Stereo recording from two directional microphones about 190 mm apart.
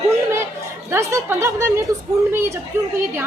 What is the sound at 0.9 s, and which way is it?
Speech, 15° right (ahead or behind).